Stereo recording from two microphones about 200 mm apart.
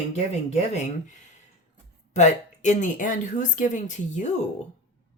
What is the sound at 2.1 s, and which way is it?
Speech, 35° left (ahead or behind).